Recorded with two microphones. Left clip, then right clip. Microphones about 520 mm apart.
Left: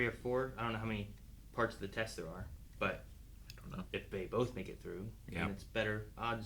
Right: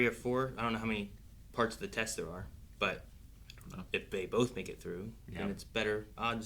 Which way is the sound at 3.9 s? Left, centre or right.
Left.